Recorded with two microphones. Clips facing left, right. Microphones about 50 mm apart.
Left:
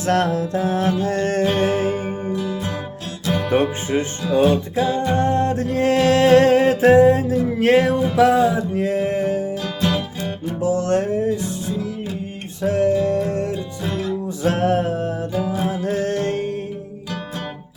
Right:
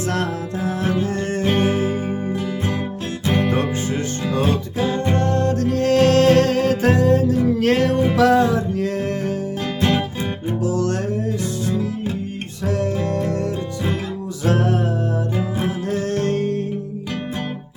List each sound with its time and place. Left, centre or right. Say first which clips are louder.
0.0 s music: left 4 dB; left
1.4 s music: right 1 dB; right
1.7 s music: left 1 dB; left
3.2 s music: right 2 dB; right
3.5 s music: left 3 dB; left
4.4 s music: left 3 dB; right
5.1 s music: left 1 dB; centre
9.8 s music: right 2 dB; right
10.6 s music: left 4 dB; left
12.6 s music: left 4 dB; left
12.9 s music: left 4 dB; right
14.4 s music: left 1 dB; left
15.4 s music: left 1 dB; right
15.9 s music: right 1 dB; left